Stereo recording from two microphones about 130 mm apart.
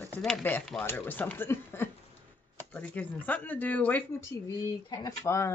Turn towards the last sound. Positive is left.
turn(degrees=20)  # may be behind; listen again after turning